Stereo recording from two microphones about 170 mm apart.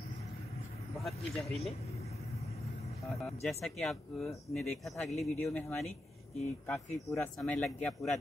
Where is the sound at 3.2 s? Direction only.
5° left (ahead or behind).